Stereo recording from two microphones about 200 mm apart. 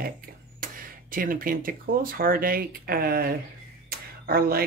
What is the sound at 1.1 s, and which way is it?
Speech, 45° right (ahead or behind).